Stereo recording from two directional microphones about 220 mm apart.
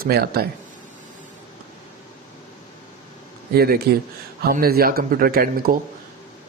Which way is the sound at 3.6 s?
45° right (ahead or behind).